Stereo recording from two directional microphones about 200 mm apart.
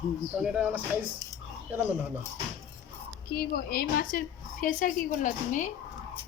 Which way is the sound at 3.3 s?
50° left (ahead or behind).